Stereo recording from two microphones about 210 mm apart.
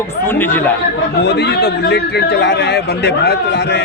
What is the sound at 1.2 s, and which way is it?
A man's voice, 50° left (ahead or behind).